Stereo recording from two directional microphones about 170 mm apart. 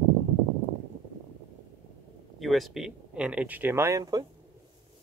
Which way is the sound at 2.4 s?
Centre (ahead or behind).